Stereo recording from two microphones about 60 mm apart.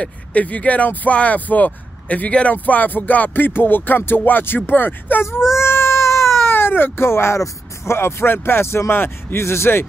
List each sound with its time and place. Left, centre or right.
0.0 s speech: left
5.6 s speech: left